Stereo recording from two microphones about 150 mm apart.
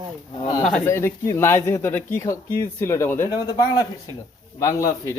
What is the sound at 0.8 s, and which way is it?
Speech, 20° left (ahead or behind).